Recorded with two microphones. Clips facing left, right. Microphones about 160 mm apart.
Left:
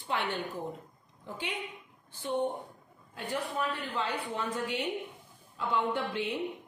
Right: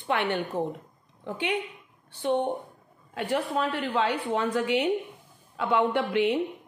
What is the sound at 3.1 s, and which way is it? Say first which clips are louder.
A woman's voice: right 7 dB; 80° right.